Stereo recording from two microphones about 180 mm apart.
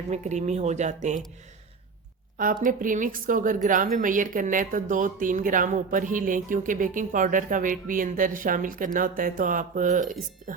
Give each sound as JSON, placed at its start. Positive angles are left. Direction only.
{"t": 0.1, "sound": "speech", "side_deg": -40}
{"t": 2.4, "sound": "a woman's voice", "side_deg": -45}